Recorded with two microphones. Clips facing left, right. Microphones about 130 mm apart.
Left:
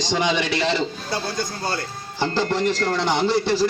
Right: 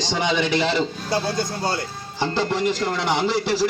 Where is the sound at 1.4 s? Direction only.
25° right (ahead or behind).